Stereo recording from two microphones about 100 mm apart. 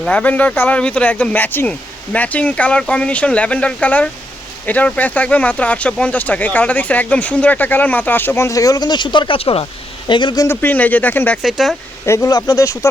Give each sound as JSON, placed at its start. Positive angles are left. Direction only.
{"t": 0.1, "sound": "speech", "side_deg": 15}
{"t": 10.1, "sound": "a man's voice", "side_deg": 55}
{"t": 10.5, "sound": "speech", "side_deg": 20}
{"t": 11.4, "sound": "speech", "side_deg": 0}
{"t": 12.0, "sound": "speech", "side_deg": 30}
{"t": 12.3, "sound": "speech", "side_deg": 40}